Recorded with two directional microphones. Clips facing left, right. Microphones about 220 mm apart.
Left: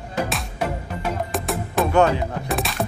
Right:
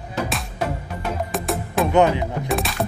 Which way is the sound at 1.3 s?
Centre (ahead or behind).